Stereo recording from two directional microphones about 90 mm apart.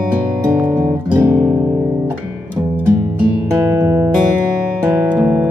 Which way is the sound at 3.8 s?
30° right (ahead or behind).